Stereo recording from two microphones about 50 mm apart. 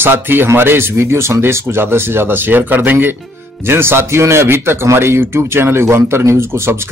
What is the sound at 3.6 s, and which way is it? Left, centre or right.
Speech, right.